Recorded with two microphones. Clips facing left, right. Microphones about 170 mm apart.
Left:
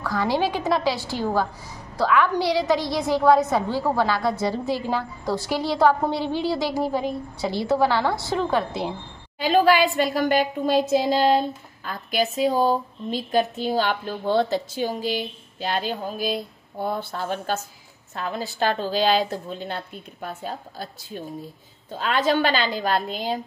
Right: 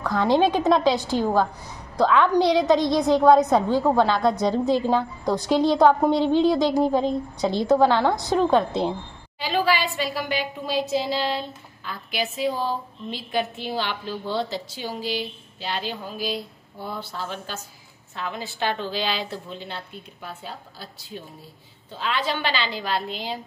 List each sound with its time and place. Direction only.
0.0 s a woman's voice: 20° right (ahead or behind)
9.4 s a woman's voice: 50° left (ahead or behind)
18.1 s a woman's voice: 40° left (ahead or behind)